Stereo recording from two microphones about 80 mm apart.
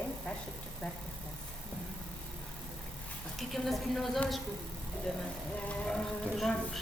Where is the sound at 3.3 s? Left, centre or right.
Centre.